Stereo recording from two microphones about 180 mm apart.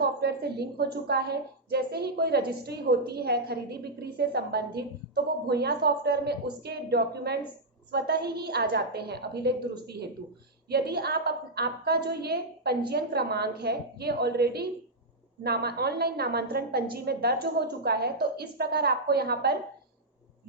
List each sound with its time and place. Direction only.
0.0 s a woman's voice: 65° right (ahead or behind)